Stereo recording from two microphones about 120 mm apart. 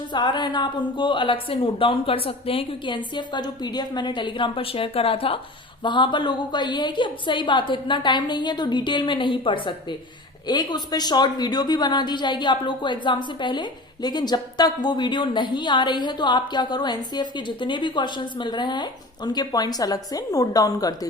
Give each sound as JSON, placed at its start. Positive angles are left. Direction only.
{"t": 0.1, "sound": "a woman's voice", "side_deg": 40}